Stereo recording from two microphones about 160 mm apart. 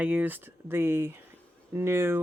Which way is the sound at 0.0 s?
10° right (ahead or behind).